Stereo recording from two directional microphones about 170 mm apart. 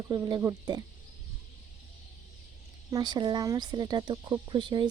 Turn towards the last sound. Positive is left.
turn(degrees=-25)  # may be behind; listen again after turning